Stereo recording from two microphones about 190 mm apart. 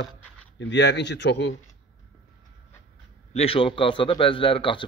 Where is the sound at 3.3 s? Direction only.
30° left (ahead or behind).